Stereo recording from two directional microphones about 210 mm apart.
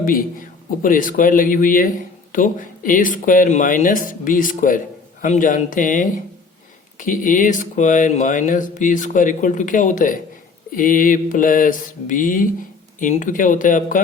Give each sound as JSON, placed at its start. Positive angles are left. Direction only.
{"t": 0.0, "sound": "a man's voice", "side_deg": 40}
{"t": 0.8, "sound": "mantra", "side_deg": 40}